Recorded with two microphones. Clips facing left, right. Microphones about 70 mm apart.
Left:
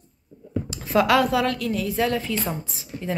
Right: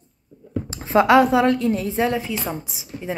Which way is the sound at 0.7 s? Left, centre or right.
Right.